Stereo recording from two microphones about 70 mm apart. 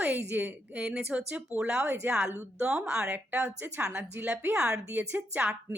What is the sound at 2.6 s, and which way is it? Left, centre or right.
A woman's voice, centre.